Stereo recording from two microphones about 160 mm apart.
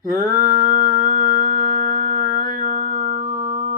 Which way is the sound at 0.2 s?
15° right (ahead or behind).